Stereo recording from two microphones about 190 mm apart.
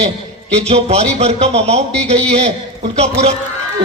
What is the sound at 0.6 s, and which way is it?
A man's voice, 35° right (ahead or behind).